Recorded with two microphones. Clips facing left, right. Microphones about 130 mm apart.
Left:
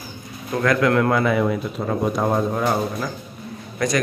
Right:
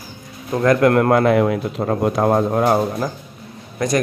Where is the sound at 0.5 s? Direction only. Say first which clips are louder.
Right 4 dB; 35° right (ahead or behind).